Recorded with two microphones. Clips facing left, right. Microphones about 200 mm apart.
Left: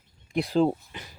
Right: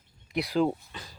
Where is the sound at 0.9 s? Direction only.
20° left (ahead or behind).